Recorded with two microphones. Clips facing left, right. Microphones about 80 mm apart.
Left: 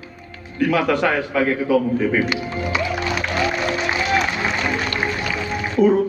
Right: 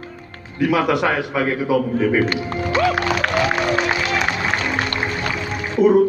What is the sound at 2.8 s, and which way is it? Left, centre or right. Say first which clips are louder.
Music: right 7 dB; right.